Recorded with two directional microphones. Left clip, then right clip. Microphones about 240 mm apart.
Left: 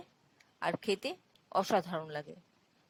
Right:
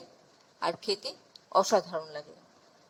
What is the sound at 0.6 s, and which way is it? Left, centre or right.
A woman's voice, left.